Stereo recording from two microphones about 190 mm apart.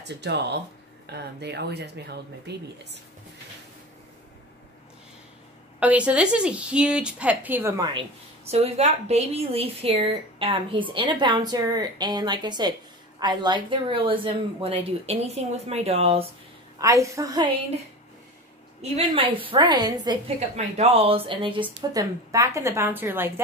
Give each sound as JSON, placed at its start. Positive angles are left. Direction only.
{"t": 0.1, "sound": "speech", "side_deg": -60}
{"t": 5.8, "sound": "a woman's voice", "side_deg": -5}
{"t": 8.5, "sound": "a woman's voice", "side_deg": -35}
{"t": 16.7, "sound": "a woman's voice", "side_deg": -15}
{"t": 18.8, "sound": "a woman's voice", "side_deg": -35}
{"t": 19.5, "sound": "a woman's voice", "side_deg": -25}
{"t": 20.5, "sound": "a woman's voice", "side_deg": -35}